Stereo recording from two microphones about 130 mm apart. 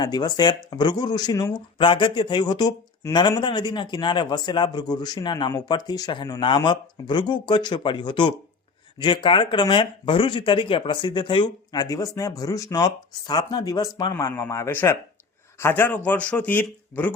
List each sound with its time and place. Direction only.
0.0 s speech: 30° left (ahead or behind); by 17.2 s 10° left (ahead or behind)